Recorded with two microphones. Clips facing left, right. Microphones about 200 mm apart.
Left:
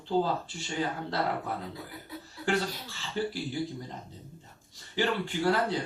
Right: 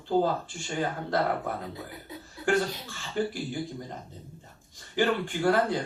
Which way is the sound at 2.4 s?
50° right (ahead or behind).